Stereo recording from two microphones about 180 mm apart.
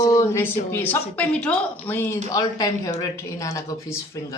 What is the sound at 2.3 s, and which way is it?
Speech, 20° left (ahead or behind).